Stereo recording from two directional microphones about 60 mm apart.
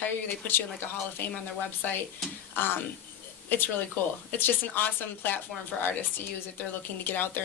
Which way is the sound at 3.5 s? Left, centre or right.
Left.